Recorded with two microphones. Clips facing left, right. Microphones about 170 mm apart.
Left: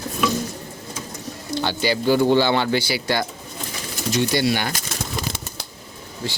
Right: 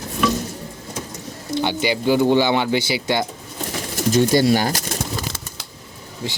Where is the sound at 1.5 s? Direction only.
20° right (ahead or behind).